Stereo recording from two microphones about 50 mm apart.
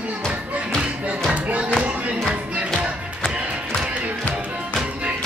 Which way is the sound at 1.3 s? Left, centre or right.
Right.